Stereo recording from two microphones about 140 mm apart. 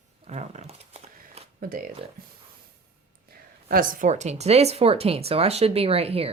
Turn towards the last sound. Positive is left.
turn(degrees=-45)  # may be behind; listen again after turning